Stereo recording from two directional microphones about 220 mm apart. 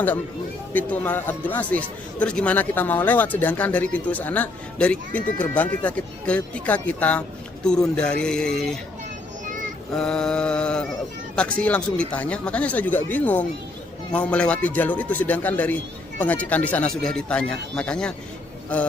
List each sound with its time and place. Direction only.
0.7 s speech: 5° left (ahead or behind)
9.9 s speech: 5° left (ahead or behind)